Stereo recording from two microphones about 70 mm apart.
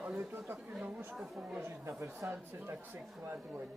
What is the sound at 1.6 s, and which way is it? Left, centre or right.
Speech, right.